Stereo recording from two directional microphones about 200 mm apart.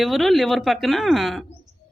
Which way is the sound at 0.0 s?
Centre (ahead or behind).